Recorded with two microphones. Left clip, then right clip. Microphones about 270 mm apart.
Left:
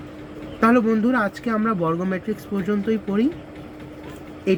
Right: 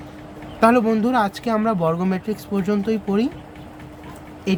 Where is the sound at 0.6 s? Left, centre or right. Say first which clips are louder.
Right 2 dB; right.